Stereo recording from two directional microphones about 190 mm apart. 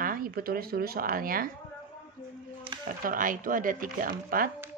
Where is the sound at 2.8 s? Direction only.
45° right (ahead or behind).